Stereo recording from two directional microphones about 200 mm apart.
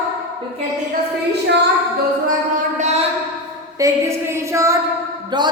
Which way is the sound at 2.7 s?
35° right (ahead or behind).